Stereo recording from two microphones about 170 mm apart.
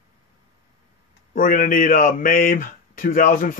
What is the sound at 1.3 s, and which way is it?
Speech, 55° left (ahead or behind).